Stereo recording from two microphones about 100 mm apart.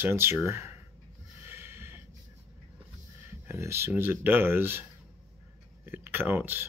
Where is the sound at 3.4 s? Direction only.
25° right (ahead or behind).